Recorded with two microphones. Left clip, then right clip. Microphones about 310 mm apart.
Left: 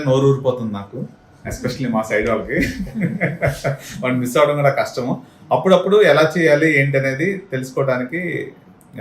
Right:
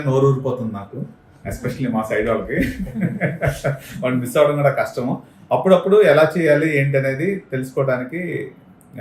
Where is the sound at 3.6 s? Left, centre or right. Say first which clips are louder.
Left 1 dB; centre.